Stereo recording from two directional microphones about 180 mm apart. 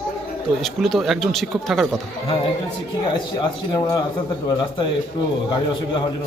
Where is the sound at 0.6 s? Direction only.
Centre (ahead or behind).